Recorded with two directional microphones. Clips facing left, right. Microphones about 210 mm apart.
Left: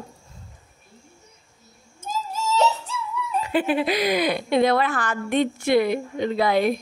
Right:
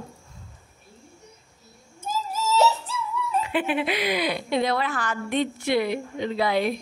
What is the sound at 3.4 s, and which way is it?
A woman's voice, 40° left (ahead or behind).